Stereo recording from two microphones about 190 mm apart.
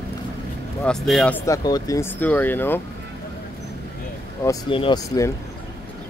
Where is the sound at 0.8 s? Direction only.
Centre (ahead or behind).